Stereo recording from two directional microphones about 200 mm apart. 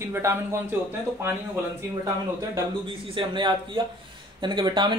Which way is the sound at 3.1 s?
25° right (ahead or behind).